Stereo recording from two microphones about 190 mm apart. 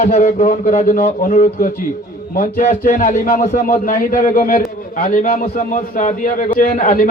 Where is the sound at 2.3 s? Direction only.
50° left (ahead or behind).